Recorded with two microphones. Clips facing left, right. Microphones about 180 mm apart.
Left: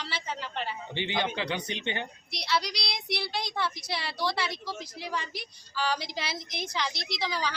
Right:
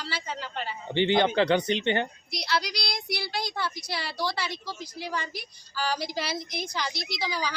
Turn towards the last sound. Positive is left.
turn(degrees=0)  # may be behind; listen again after turning